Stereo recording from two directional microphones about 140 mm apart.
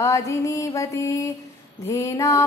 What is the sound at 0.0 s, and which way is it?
Mantra, 20° left (ahead or behind).